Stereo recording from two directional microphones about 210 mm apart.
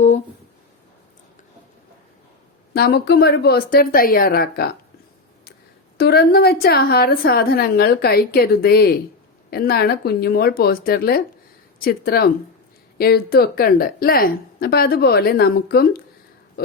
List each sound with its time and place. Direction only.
2.7 s a woman's voice: 50° left (ahead or behind)
6.0 s a woman's voice: 50° left (ahead or behind)